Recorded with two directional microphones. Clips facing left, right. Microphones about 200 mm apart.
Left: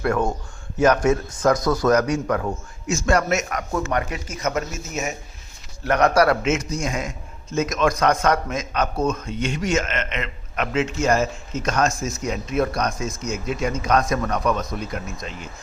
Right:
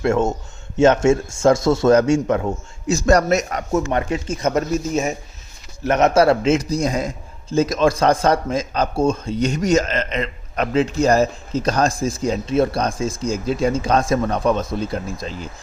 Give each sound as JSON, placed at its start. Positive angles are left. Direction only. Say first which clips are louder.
{"t": 0.0, "sound": "a man's voice", "louder": "right 4 dB", "side_deg": -25}
{"t": 2.8, "sound": "a man's voice", "louder": "right 5 dB", "side_deg": -35}
{"t": 3.7, "sound": "a man's voice", "louder": "right 6 dB", "side_deg": -25}
{"t": 5.8, "sound": "a man's voice", "louder": "right 3 dB", "side_deg": -20}